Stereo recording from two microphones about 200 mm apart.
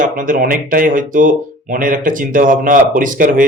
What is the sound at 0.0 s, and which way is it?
Speech, 40° right (ahead or behind).